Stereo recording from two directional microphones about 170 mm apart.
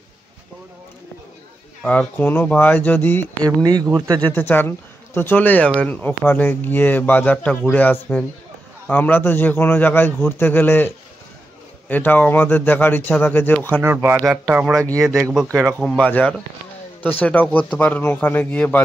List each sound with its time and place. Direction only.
1.8 s speech: 5° left (ahead or behind)
3.4 s speech: 20° right (ahead or behind)
4.2 s speech: 10° left (ahead or behind)
11.9 s speech: 10° left (ahead or behind)
13.8 s speech: 15° right (ahead or behind)
15.8 s speech: 5° left (ahead or behind)